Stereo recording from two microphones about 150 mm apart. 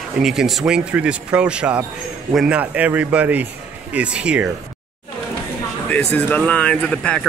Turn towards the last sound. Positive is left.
turn(degrees=5)  # may be behind; listen again after turning